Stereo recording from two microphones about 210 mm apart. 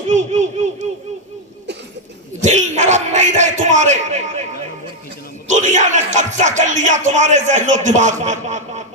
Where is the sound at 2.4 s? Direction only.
35° right (ahead or behind).